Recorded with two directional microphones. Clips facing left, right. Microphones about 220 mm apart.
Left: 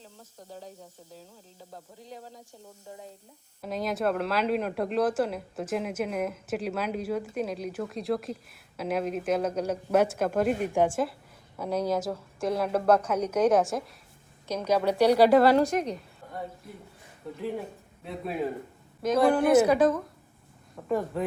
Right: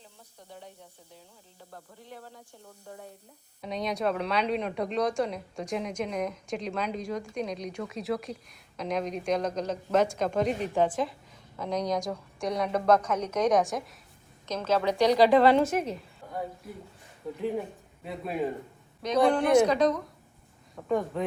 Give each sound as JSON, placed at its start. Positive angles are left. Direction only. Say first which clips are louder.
{"t": 2.8, "sound": "a woman's voice", "louder": "even", "side_deg": 10}
{"t": 17.2, "sound": "speech", "louder": "right 2 dB", "side_deg": 0}